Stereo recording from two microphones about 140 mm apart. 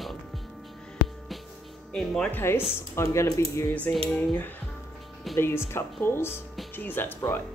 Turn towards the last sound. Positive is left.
turn(degrees=15)  # may be behind; listen again after turning